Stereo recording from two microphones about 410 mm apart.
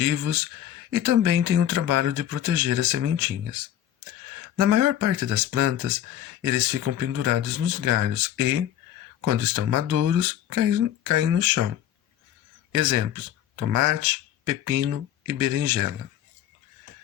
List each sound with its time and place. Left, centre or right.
0.0 s speech: right
12.7 s speech: right